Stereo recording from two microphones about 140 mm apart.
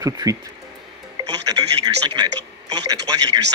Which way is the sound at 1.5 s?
30° right (ahead or behind).